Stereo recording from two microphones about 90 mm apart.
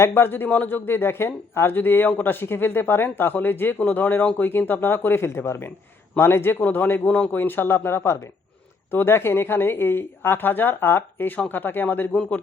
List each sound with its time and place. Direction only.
0.0 s a man's voice: 25° left (ahead or behind)